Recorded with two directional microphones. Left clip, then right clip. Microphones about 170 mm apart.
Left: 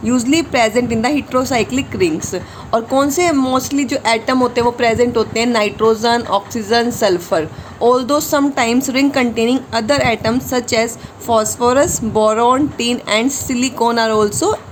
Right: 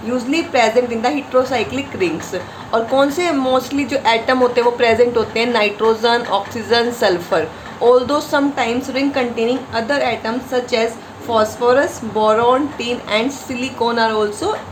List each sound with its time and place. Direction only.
0.1 s a woman's voice: 55° left (ahead or behind)